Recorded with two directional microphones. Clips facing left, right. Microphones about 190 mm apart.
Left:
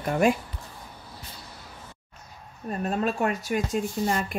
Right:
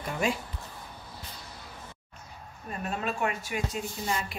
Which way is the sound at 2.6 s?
40° left (ahead or behind).